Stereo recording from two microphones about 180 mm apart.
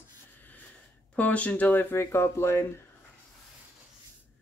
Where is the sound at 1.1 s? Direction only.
10° left (ahead or behind).